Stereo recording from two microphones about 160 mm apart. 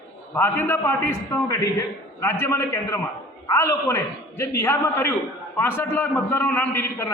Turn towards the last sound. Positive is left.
turn(degrees=15)  # may be behind; listen again after turning